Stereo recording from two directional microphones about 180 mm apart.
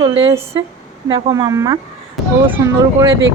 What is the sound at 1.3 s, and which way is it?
Speech, 20° right (ahead or behind).